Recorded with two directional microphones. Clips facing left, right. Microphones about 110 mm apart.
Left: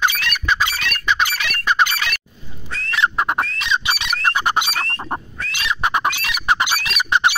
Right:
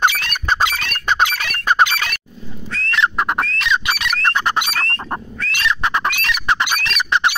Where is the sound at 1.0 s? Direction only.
45° right (ahead or behind).